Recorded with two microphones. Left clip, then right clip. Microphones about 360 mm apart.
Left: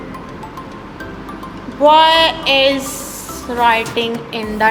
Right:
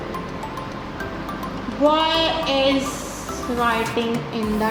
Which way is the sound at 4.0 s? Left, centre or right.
Left.